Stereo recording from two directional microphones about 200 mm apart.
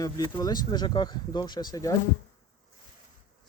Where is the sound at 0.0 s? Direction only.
20° left (ahead or behind).